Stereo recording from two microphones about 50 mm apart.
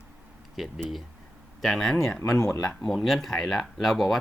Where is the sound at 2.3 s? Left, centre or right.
Left.